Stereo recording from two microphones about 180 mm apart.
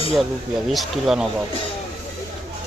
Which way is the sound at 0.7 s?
Centre (ahead or behind).